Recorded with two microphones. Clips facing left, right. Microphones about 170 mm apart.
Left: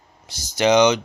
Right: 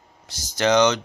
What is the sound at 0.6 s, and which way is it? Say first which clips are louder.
Speech: left 3 dB; 10° left (ahead or behind).